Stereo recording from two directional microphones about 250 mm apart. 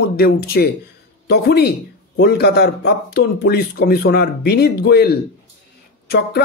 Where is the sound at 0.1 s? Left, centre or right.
Left.